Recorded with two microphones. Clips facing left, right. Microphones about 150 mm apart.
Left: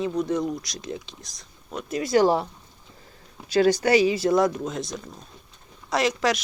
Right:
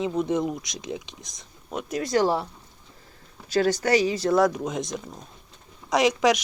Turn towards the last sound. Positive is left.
turn(degrees=-15)  # may be behind; listen again after turning